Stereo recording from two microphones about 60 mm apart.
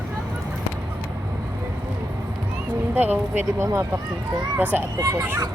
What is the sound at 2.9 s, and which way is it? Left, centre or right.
Speech, right.